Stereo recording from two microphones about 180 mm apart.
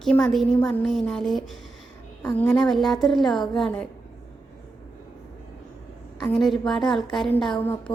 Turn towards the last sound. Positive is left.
turn(degrees=5)  # may be behind; listen again after turning